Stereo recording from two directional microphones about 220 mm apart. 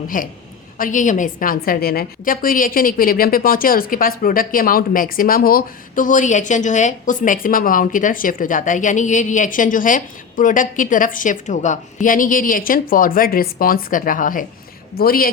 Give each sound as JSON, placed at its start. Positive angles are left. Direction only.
{"t": 0.1, "sound": "a woman's voice", "side_deg": 35}